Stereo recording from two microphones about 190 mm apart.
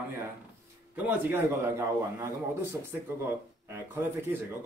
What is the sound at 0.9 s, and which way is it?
A man's voice, 10° right (ahead or behind).